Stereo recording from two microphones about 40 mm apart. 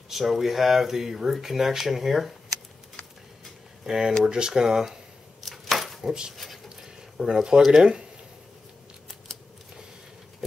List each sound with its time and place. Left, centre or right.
0.1 s speech: centre
3.8 s speech: centre
5.4 s chopping: centre
6.3 s speech: centre